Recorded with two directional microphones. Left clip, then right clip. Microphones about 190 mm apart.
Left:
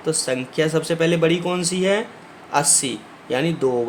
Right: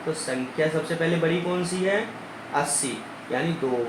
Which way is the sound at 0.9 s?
65° left (ahead or behind).